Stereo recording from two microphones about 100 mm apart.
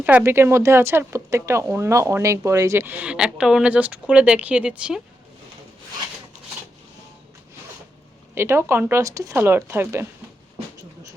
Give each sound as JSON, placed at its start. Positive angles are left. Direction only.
{"t": 0.2, "sound": "speech", "side_deg": -25}
{"t": 2.8, "sound": "speech", "side_deg": -15}
{"t": 8.4, "sound": "speech", "side_deg": -25}